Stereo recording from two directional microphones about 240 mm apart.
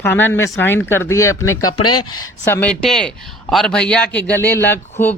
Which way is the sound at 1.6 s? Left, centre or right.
Left.